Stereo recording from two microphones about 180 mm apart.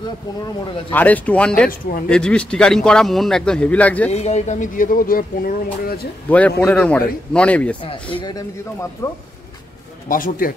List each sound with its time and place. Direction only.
0.9 s a man's voice: 10° left (ahead or behind)
4.1 s speech: 35° left (ahead or behind); by 5.9 s 55° left (ahead or behind)
6.2 s speech: 10° left (ahead or behind)
7.8 s speech: 30° left (ahead or behind)
10.0 s speech: 50° left (ahead or behind)